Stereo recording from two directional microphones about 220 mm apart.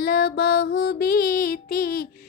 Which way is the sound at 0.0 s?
50° left (ahead or behind).